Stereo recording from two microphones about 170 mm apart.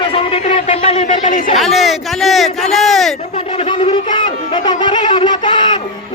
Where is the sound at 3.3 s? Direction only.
35° left (ahead or behind).